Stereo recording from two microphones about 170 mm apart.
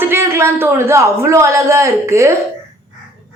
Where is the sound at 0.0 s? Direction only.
15° right (ahead or behind).